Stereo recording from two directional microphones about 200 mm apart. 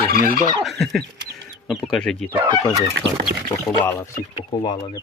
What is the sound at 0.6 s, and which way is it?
Speech, centre (ahead or behind).